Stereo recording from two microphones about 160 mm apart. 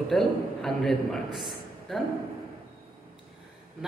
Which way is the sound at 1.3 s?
Centre (ahead or behind).